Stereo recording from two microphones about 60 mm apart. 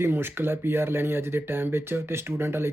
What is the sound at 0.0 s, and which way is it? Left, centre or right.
Speech, right.